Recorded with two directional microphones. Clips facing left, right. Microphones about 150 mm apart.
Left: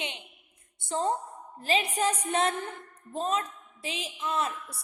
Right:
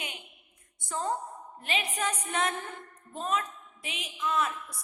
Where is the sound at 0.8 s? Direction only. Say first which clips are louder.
Left 3 dB; 30° left (ahead or behind).